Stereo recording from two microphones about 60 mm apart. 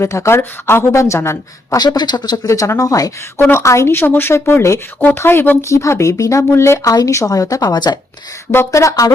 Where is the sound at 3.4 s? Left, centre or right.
Left.